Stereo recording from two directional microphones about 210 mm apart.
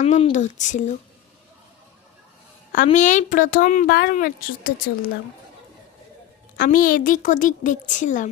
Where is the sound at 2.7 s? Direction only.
35° left (ahead or behind).